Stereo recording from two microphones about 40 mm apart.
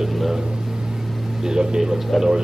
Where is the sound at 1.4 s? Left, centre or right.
Centre.